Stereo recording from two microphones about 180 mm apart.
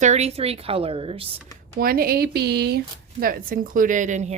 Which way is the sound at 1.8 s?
55° right (ahead or behind).